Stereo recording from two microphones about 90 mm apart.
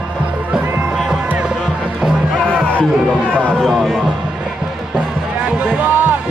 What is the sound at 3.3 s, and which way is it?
Speech, 15° left (ahead or behind).